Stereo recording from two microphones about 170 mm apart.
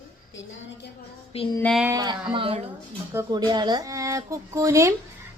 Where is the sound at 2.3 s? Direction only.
35° right (ahead or behind).